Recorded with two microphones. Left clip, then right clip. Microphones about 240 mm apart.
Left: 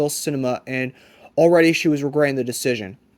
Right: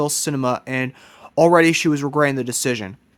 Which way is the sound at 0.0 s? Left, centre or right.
Centre.